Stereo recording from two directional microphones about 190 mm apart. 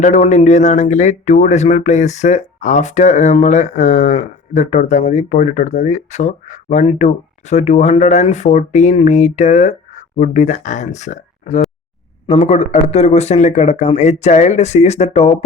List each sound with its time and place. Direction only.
0.0 s speech: 40° left (ahead or behind)